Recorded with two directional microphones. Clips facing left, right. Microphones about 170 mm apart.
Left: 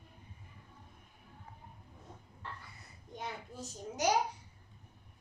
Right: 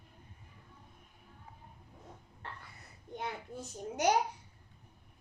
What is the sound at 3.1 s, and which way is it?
Speech, 55° right (ahead or behind).